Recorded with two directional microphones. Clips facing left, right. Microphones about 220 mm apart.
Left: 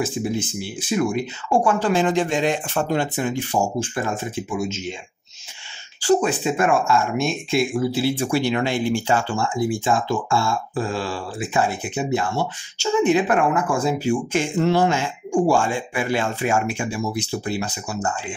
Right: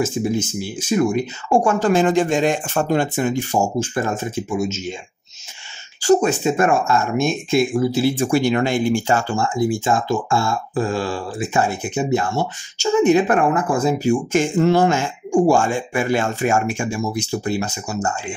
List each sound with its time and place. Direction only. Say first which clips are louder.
0.0 s speech: right 3 dB; 45° right (ahead or behind)
6.0 s speech: right 3 dB; 45° right (ahead or behind)